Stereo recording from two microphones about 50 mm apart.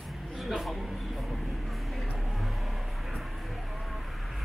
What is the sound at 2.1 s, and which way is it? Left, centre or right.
Vehicle, centre.